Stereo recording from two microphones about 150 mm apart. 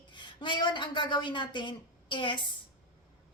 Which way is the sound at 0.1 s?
30° left (ahead or behind).